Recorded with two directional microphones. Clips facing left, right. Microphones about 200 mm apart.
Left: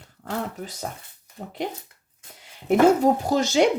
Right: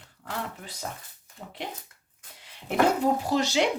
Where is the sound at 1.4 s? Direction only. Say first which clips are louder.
Left 6 dB; 45° left (ahead or behind).